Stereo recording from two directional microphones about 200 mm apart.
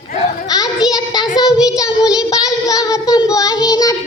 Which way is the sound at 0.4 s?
20° left (ahead or behind).